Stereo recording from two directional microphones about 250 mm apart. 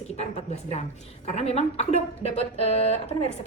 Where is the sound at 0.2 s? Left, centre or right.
Left.